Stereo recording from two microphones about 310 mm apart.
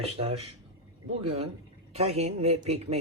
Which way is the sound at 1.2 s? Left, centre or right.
Centre.